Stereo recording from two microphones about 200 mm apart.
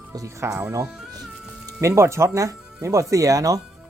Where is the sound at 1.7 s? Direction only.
15° right (ahead or behind).